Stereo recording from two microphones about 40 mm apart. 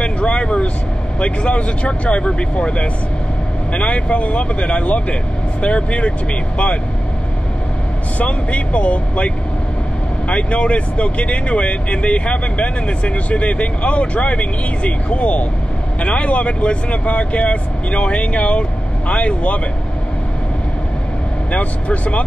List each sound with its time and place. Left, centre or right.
0.0 s vehicle: left
1.2 s speech: left
8.2 s speech: left
21.5 s speech: left